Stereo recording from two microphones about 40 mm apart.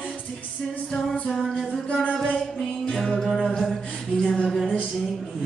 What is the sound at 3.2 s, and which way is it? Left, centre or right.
Music, centre.